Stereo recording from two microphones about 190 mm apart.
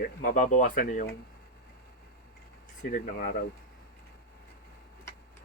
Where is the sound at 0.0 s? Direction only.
45° left (ahead or behind).